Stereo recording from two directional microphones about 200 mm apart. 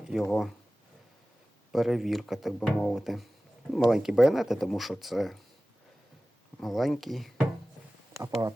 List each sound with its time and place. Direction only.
0.0 s speech: centre (ahead or behind)
1.7 s speech: centre (ahead or behind)
6.6 s speech: centre (ahead or behind)
8.2 s speech: 15° right (ahead or behind)